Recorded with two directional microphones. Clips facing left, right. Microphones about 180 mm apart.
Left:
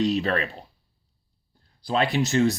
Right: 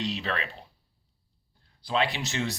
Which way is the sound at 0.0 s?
45° left (ahead or behind).